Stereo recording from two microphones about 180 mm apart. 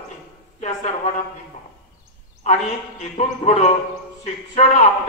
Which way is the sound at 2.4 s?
40° left (ahead or behind).